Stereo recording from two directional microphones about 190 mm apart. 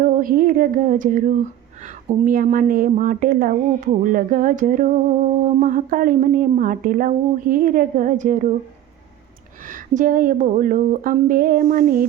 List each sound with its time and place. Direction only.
0.0 s speech: 45° right (ahead or behind)
9.6 s speech: 45° right (ahead or behind)